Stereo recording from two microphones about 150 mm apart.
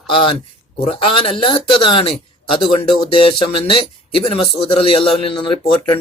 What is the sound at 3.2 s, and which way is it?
Speech, 35° left (ahead or behind).